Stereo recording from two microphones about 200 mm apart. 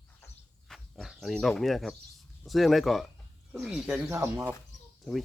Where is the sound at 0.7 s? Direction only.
Centre (ahead or behind).